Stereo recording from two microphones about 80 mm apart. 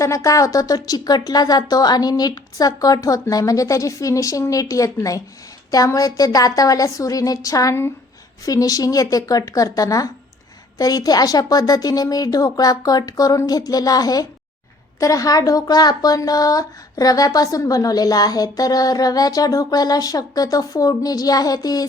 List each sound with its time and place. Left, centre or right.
0.0 s speech: left